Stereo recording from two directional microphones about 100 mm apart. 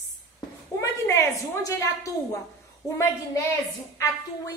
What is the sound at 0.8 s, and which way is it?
A woman's voice, 30° left (ahead or behind).